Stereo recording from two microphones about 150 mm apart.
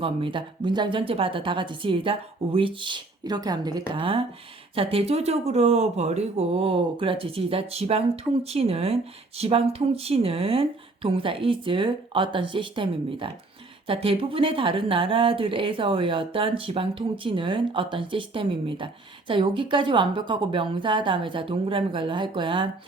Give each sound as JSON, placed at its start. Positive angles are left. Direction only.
{"t": 0.0, "sound": "a woman's voice", "side_deg": -35}